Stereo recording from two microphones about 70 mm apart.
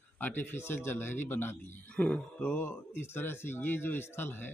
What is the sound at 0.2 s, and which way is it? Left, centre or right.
Speech, left.